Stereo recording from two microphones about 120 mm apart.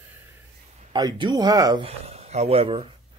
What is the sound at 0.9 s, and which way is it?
Speech, 35° right (ahead or behind).